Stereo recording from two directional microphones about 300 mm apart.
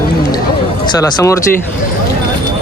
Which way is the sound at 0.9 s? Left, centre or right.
Centre.